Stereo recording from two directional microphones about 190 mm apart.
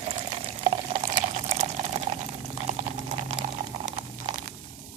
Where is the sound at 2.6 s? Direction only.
35° right (ahead or behind).